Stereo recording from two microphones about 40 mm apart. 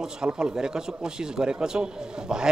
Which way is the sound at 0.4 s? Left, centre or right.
Centre.